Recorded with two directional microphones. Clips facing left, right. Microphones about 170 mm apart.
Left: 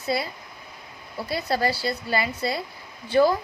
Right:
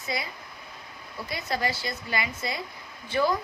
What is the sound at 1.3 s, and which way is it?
A woman's voice, 35° left (ahead or behind).